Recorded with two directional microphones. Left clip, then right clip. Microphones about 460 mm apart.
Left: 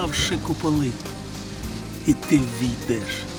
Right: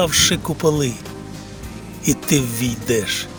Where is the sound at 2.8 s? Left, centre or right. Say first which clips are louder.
Right 9 dB; right.